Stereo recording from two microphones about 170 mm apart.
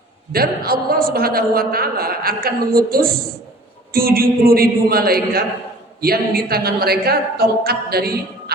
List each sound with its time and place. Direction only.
0.3 s a woman's voice: 65° right (ahead or behind)